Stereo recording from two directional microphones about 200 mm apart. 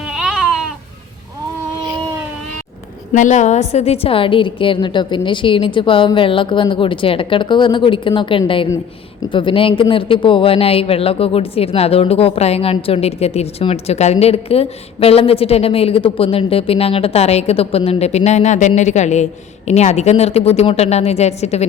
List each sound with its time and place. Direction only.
0.1 s babbling: 5° right (ahead or behind)
3.1 s a man's voice: 40° left (ahead or behind)